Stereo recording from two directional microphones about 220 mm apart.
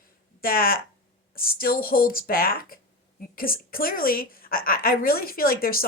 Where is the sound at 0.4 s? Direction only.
40° left (ahead or behind).